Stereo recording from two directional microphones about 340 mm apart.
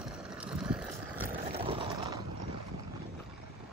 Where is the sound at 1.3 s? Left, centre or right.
Centre.